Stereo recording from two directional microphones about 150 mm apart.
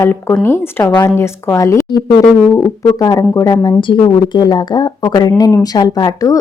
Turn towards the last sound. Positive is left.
turn(degrees=25)  # may be behind; listen again after turning